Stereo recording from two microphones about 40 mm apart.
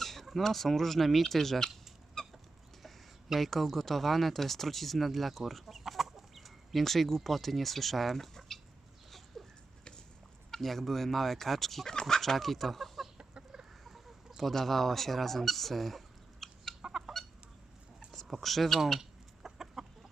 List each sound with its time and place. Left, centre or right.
0.0 s speech: centre
2.2 s chicken: centre
3.2 s speech: centre
9.4 s a sound: centre
10.5 s speech: centre
11.9 s chicken: centre
13.1 s chicken: centre
13.8 s chicken: centre
14.5 s speech: centre
18.3 s speech: centre
19.5 s chicken: centre